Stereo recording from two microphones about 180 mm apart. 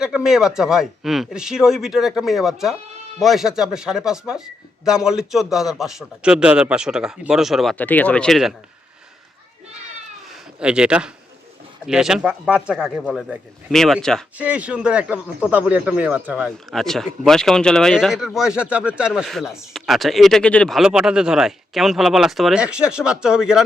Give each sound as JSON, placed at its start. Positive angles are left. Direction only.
{"t": 0.0, "sound": "speech", "side_deg": -5}
{"t": 10.2, "sound": "a sound", "side_deg": -5}
{"t": 11.9, "sound": "speech", "side_deg": -5}
{"t": 16.7, "sound": "speech", "side_deg": 0}